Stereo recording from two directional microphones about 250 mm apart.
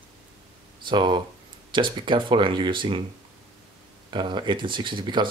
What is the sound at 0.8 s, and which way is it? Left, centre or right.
Speech, centre.